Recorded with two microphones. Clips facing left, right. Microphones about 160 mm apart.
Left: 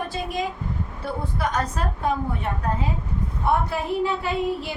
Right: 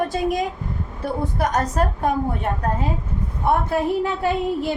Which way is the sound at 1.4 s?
45° right (ahead or behind).